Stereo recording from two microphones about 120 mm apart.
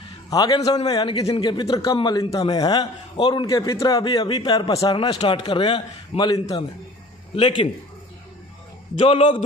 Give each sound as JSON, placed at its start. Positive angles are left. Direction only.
{"t": 0.3, "sound": "a man's voice", "side_deg": 30}
{"t": 9.0, "sound": "a man's voice", "side_deg": 50}